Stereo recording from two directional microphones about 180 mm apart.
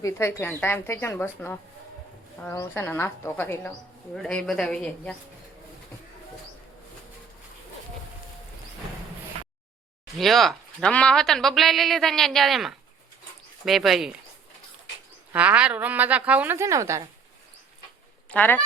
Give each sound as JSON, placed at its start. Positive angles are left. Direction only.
{"t": 0.0, "sound": "a woman's voice", "side_deg": 15}
{"t": 10.2, "sound": "speech", "side_deg": 0}
{"t": 15.3, "sound": "a woman's voice", "side_deg": -5}
{"t": 18.3, "sound": "speech", "side_deg": 10}